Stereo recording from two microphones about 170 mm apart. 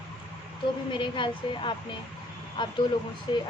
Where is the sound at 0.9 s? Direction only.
30° left (ahead or behind).